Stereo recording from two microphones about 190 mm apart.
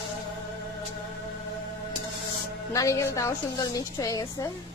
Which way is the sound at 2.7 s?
15° left (ahead or behind).